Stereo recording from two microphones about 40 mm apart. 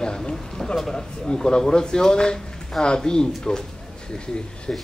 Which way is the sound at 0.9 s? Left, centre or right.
Left.